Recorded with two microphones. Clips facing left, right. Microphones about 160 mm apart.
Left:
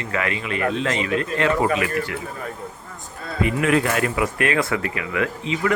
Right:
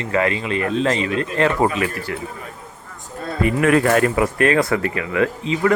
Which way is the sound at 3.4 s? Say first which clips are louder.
Right 4 dB; 45° right (ahead or behind).